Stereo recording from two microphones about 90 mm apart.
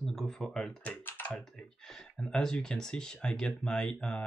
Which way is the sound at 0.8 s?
20° left (ahead or behind).